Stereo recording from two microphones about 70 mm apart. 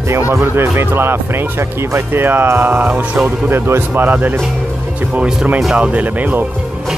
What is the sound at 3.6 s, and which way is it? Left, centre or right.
Speech, right.